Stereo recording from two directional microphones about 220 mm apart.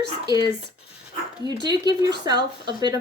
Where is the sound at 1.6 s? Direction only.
20° right (ahead or behind).